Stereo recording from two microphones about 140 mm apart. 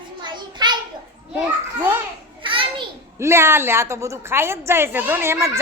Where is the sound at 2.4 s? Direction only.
40° right (ahead or behind).